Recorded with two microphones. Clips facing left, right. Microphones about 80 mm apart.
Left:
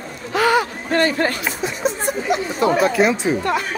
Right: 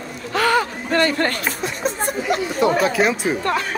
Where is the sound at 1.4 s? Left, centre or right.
Centre.